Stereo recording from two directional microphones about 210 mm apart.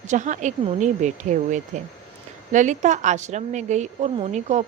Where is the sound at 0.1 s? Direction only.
35° right (ahead or behind).